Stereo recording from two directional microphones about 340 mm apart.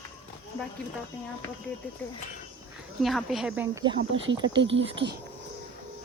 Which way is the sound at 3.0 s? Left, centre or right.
Centre.